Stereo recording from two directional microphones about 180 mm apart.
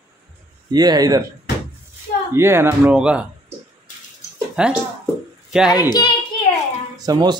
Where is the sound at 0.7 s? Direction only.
20° right (ahead or behind).